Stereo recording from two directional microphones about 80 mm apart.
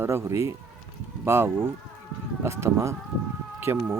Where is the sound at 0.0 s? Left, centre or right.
Right.